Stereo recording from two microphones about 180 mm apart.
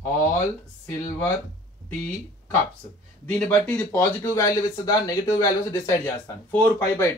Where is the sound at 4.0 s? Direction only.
20° left (ahead or behind).